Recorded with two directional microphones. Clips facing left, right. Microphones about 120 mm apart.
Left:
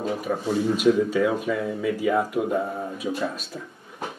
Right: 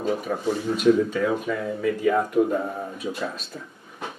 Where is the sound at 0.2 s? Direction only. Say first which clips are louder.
Left 2 dB; 5° left (ahead or behind).